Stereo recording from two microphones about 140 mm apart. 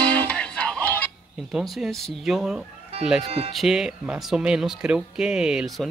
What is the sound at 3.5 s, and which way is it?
Speech, 5° right (ahead or behind).